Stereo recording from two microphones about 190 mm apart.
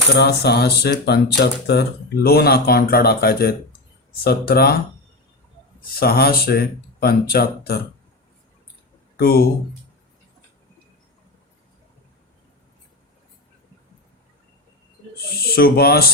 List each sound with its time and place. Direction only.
0.1 s speech: 60° left (ahead or behind)
6.0 s speech: 55° left (ahead or behind)
9.1 s speech: 50° left (ahead or behind)
15.4 s speech: 55° left (ahead or behind)